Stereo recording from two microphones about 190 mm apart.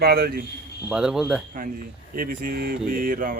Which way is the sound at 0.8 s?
5° right (ahead or behind).